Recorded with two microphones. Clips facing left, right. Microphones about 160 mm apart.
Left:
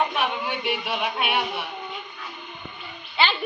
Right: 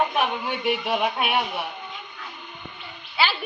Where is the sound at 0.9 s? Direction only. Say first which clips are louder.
Right 3 dB; 40° right (ahead or behind).